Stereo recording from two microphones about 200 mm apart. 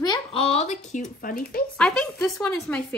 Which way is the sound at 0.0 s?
25° left (ahead or behind).